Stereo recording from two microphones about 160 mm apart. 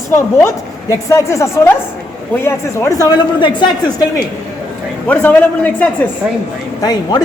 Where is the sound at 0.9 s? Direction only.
20° left (ahead or behind).